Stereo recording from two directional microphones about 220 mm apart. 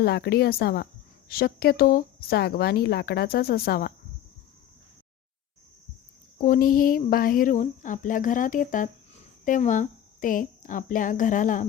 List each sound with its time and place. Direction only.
0.0 s speech: 45° left (ahead or behind)
6.4 s speech: 40° left (ahead or behind)